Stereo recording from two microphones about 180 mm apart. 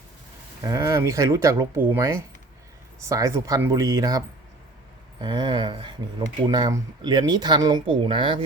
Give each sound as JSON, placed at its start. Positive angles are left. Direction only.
{"t": 0.6, "sound": "speech", "side_deg": -20}
{"t": 5.2, "sound": "speech", "side_deg": -25}